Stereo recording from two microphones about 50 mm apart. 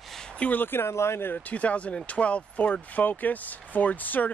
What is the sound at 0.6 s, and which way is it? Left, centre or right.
Speech, left.